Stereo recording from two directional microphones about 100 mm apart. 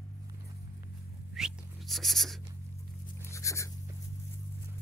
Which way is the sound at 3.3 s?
30° left (ahead or behind).